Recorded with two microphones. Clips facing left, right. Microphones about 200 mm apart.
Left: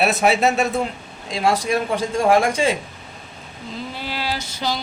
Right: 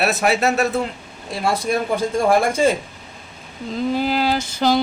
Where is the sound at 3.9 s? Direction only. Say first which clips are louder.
Right 8 dB; 45° right (ahead or behind).